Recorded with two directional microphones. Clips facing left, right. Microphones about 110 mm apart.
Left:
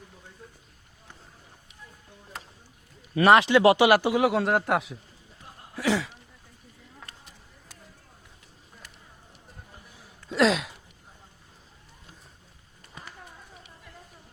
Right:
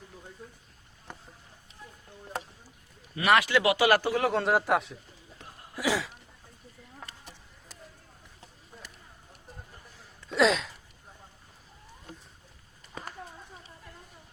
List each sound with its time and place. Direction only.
3.2 s speech: 25° left (ahead or behind)
3.8 s speech: 15° left (ahead or behind); by 6.1 s 5° right (ahead or behind)
10.2 s a sound: centre (ahead or behind)